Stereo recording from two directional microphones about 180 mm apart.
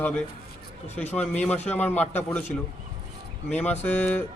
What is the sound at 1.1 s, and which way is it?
A man's voice, 10° left (ahead or behind).